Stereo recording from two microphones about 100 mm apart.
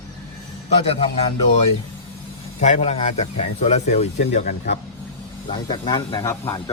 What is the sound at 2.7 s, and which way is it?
Speech, 90° left.